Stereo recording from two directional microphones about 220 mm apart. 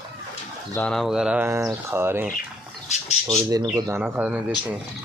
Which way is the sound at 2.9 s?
30° left (ahead or behind).